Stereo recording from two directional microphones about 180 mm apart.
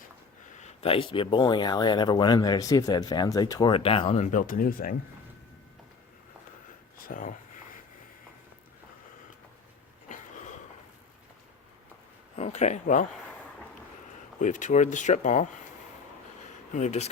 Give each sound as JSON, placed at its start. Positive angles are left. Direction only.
{"t": 0.6, "sound": "speech", "side_deg": 35}
{"t": 7.0, "sound": "speech", "side_deg": 45}
{"t": 10.1, "sound": "a sound", "side_deg": 45}
{"t": 12.4, "sound": "speech", "side_deg": 40}
{"t": 14.4, "sound": "speech", "side_deg": 45}
{"t": 16.7, "sound": "speech", "side_deg": 40}